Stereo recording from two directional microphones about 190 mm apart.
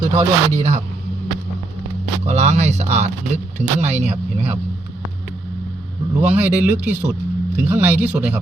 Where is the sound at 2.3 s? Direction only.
35° right (ahead or behind).